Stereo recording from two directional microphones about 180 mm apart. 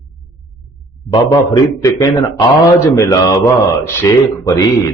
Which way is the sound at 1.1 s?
20° left (ahead or behind).